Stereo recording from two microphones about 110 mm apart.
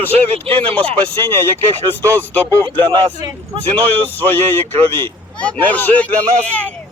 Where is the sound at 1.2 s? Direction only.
20° left (ahead or behind).